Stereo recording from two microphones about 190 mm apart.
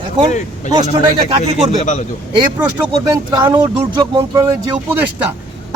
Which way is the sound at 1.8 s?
40° left (ahead or behind).